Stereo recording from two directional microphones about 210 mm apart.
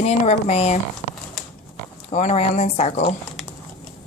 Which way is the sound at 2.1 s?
30° left (ahead or behind).